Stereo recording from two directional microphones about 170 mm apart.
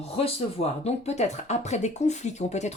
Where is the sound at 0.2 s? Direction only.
35° left (ahead or behind).